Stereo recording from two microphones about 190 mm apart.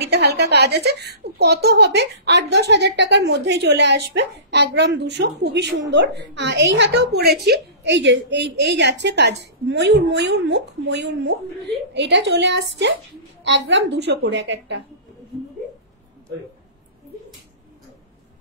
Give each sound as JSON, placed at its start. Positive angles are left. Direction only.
{"t": 0.0, "sound": "a woman's voice", "side_deg": -60}